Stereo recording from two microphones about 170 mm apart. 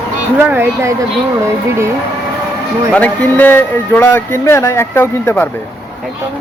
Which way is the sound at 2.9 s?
10° left (ahead or behind).